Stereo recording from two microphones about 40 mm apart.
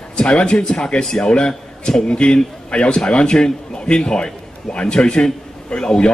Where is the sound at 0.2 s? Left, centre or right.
Left.